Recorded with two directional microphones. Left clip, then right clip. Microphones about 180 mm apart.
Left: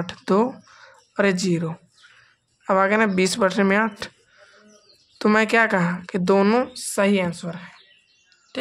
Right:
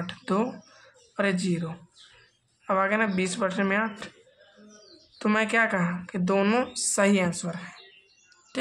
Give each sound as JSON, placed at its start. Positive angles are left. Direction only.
{"t": 0.0, "sound": "speech", "side_deg": 45}
{"t": 5.2, "sound": "speech", "side_deg": 45}